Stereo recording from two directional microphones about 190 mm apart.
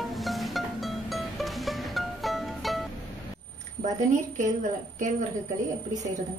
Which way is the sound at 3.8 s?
40° right (ahead or behind).